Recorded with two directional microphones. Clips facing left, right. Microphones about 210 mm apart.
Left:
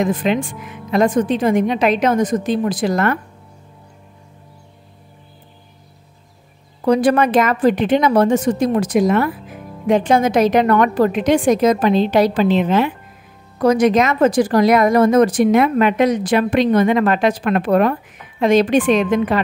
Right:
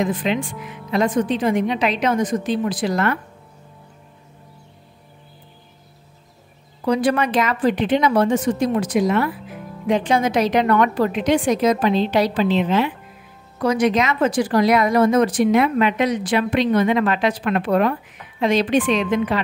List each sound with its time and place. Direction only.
0.0 s speech: 45° left (ahead or behind)
6.9 s speech: 45° left (ahead or behind)